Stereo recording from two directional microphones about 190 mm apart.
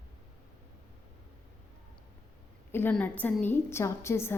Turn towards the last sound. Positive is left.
turn(degrees=15)  # may be behind; listen again after turning